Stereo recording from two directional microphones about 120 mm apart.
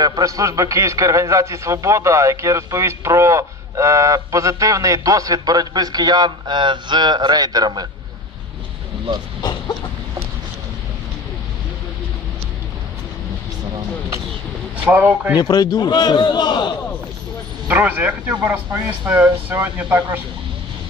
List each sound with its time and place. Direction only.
0.0 s a man's voice: 30° right (ahead or behind)
9.4 s a sound: 35° left (ahead or behind)
14.9 s speech: 15° right (ahead or behind)
15.3 s a man's voice: 30° left (ahead or behind)
17.6 s speech: 15° right (ahead or behind)